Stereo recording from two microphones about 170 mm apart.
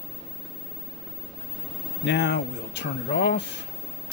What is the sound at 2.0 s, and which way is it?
Speech, 90° left.